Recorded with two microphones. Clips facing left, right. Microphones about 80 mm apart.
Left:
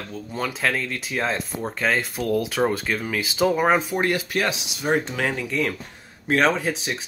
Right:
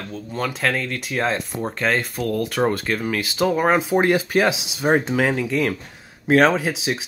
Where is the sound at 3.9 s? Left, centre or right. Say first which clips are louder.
Right 5 dB; right.